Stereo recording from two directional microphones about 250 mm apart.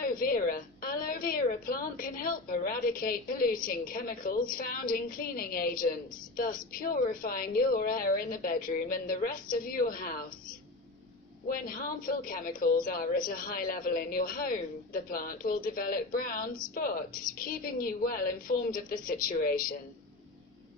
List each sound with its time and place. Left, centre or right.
0.0 s a woman's voice: left
11.4 s a woman's voice: left